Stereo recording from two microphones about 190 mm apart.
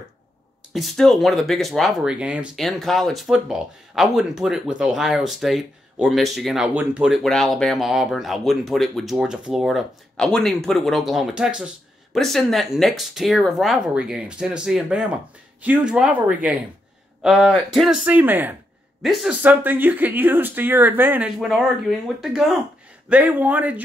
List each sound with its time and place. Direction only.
0.7 s speech: centre (ahead or behind)